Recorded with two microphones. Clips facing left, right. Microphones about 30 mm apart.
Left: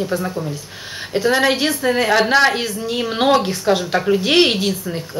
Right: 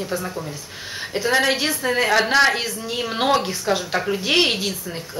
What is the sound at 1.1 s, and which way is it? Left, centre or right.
A woman's voice, centre.